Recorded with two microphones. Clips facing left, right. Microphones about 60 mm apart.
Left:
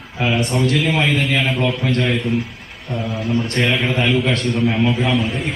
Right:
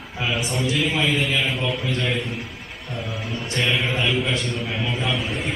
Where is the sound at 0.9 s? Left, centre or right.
Left.